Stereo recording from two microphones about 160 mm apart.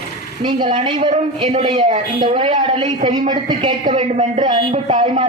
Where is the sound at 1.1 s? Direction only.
40° right (ahead or behind).